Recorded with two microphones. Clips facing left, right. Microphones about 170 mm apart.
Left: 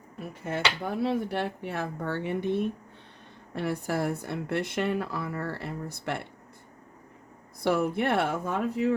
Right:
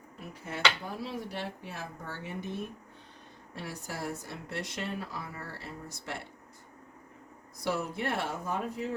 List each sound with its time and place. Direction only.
0.4 s speech: 60° left (ahead or behind)
7.6 s speech: 60° left (ahead or behind)